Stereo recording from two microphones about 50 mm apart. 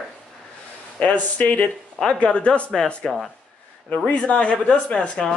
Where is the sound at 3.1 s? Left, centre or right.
Centre.